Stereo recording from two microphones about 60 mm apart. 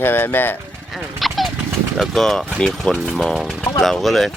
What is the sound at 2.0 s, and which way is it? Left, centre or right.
Speech, centre.